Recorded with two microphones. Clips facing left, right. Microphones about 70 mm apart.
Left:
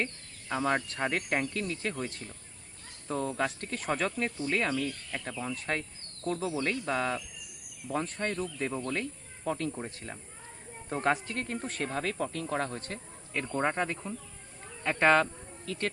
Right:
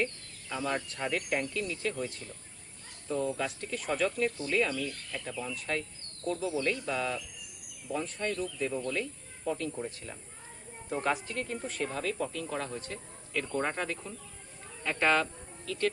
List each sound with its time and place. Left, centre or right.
0.0 s speech: left
11.0 s speech: left
13.4 s speech: left